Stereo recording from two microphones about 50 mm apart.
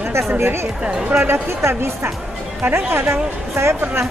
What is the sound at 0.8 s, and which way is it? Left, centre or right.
Speech, centre.